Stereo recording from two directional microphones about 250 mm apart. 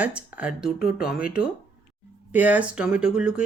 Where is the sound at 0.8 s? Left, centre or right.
Left.